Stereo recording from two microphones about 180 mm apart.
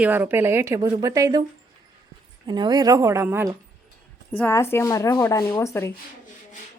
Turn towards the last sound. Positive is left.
turn(degrees=15)  # may be behind; listen again after turning